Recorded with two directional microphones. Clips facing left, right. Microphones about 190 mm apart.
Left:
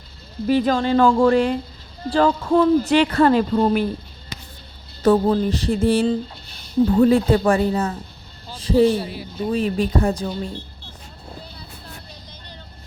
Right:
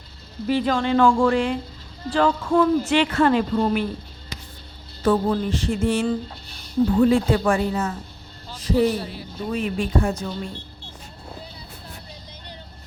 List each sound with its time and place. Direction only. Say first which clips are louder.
0.4 s a woman's voice: left 3 dB; 40° left (ahead or behind)
5.0 s a woman's voice: left 4 dB; 40° left (ahead or behind)